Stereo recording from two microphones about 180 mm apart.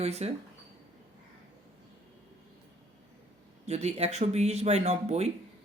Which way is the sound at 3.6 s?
35° right (ahead or behind).